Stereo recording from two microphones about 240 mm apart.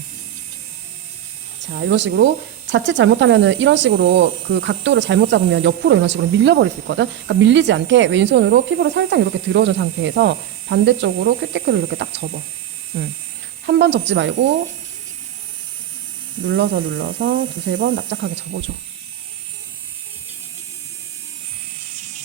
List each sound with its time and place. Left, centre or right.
1.7 s speech: right
13.7 s speech: right
16.4 s speech: right